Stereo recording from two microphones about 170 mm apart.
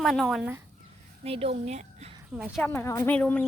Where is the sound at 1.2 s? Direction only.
35° right (ahead or behind).